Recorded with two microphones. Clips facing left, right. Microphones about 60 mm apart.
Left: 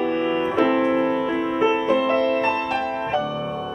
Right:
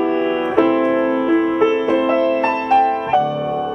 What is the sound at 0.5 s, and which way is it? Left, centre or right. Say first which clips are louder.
Music: right 5 dB; centre.